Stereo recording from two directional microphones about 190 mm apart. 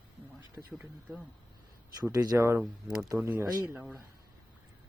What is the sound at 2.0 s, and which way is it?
Speech, 20° right (ahead or behind).